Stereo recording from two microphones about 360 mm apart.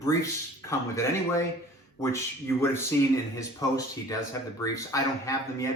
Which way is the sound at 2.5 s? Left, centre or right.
Centre.